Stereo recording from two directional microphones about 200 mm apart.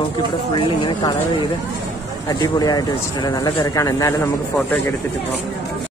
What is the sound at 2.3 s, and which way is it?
Speech, 20° left (ahead or behind).